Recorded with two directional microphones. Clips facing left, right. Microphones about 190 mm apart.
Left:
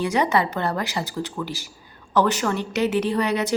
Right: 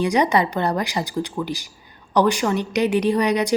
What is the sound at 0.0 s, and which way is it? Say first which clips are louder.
A woman's voice: right 3 dB; 15° right (ahead or behind).